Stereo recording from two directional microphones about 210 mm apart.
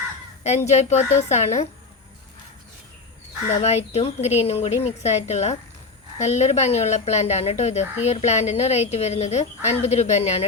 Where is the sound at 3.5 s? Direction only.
30° left (ahead or behind).